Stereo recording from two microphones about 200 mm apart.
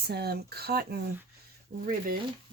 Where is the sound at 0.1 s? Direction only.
55° right (ahead or behind).